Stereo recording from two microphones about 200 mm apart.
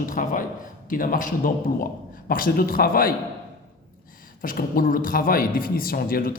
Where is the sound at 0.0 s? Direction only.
45° left (ahead or behind).